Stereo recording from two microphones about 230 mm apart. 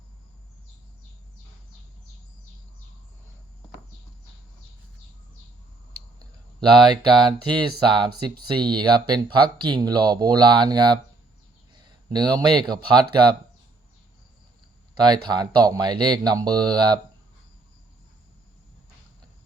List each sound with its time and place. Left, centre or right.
6.7 s speech: centre
12.1 s speech: centre
14.9 s speech: centre